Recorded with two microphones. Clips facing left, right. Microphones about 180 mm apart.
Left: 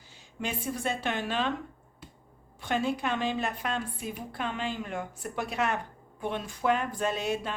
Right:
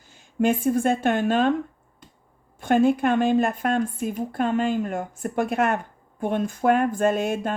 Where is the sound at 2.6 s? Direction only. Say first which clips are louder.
Right 10 dB; 50° right (ahead or behind).